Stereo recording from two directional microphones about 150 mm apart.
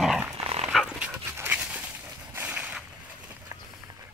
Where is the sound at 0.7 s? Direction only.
5° right (ahead or behind).